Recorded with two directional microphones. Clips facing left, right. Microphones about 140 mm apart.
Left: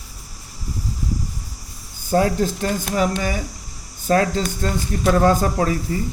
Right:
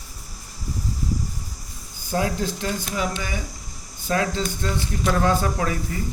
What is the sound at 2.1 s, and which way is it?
Speech, 45° left (ahead or behind).